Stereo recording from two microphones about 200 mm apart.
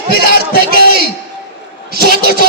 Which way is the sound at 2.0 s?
45° left (ahead or behind).